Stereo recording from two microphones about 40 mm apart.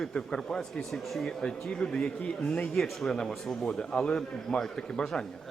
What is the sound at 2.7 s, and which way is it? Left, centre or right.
Speech, centre.